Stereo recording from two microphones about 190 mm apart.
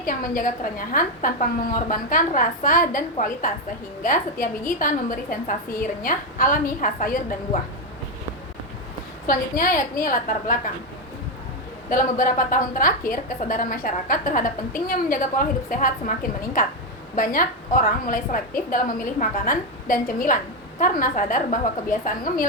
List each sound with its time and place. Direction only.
0.0 s a woman's voice: 45° left (ahead or behind)
9.2 s a woman's voice: 45° left (ahead or behind)
11.9 s a woman's voice: 45° left (ahead or behind)
18.0 s a woman's voice: 45° left (ahead or behind)